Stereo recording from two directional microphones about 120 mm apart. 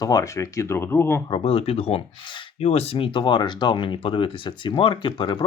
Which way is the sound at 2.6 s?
60° left (ahead or behind).